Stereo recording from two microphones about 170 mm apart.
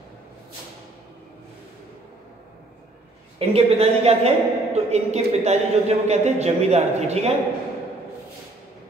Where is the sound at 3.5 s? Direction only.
35° right (ahead or behind).